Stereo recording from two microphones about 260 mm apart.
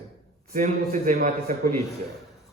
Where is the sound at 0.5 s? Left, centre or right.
Right.